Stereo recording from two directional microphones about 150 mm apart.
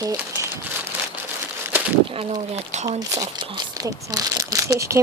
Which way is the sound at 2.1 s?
45° right (ahead or behind).